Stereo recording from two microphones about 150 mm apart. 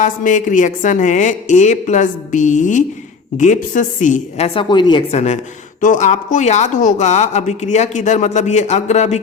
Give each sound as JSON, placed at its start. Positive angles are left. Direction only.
{"t": 0.0, "sound": "a woman's voice", "side_deg": 60}
{"t": 5.1, "sound": "speech", "side_deg": 50}